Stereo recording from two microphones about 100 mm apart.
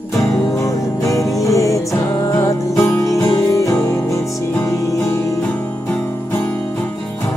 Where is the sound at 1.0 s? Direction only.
30° left (ahead or behind).